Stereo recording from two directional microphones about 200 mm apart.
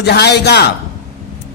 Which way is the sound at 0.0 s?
55° left (ahead or behind).